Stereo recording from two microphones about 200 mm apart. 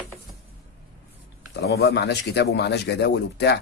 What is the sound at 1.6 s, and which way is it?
Speech, 55° left (ahead or behind).